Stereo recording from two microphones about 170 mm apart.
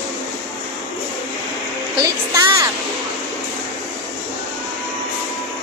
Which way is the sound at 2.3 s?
20° right (ahead or behind).